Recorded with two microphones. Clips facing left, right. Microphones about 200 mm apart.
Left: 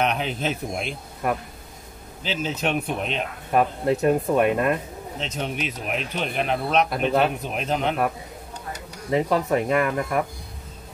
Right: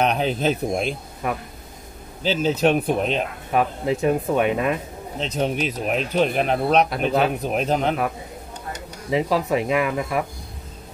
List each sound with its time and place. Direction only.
0.0 s speech: 35° right (ahead or behind)
1.2 s speech: centre (ahead or behind)
2.2 s speech: 40° right (ahead or behind)
3.5 s speech: centre (ahead or behind)
5.2 s speech: 35° right (ahead or behind)
6.9 s speech: centre (ahead or behind)
7.4 s speech: 40° right (ahead or behind)
9.1 s speech: 5° right (ahead or behind)